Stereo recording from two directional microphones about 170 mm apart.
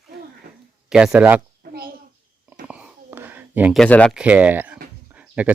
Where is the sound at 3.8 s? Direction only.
5° left (ahead or behind).